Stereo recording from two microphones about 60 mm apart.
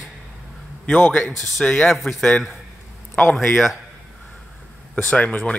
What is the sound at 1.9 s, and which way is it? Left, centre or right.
Speech, centre.